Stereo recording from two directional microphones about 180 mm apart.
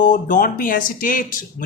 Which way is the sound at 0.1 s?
50° left (ahead or behind).